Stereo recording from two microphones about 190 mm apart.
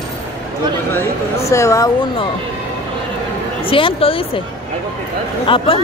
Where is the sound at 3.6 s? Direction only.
30° left (ahead or behind).